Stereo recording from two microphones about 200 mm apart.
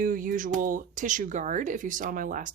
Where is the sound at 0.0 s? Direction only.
45° right (ahead or behind).